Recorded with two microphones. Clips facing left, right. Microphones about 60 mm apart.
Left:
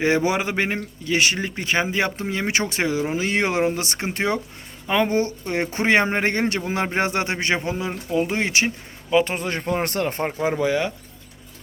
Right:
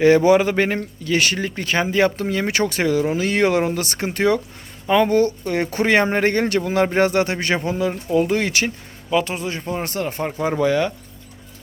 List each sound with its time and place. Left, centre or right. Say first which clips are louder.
0.0 s speech: right 7 dB; centre
9.2 s speech: even; left
9.5 s speech: left 2 dB; left
10.4 s speech: right 3 dB; centre